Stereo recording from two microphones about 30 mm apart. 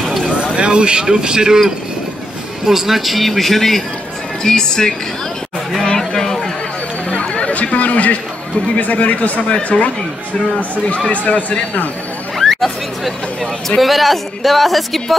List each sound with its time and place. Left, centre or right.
0.6 s speech: right
2.6 s speech: centre
4.4 s speech: centre
5.8 s chatter: centre
7.1 s a sound: left
8.7 s speech: left
11.1 s speech: left
12.4 s a sound: centre
13.7 s speech: centre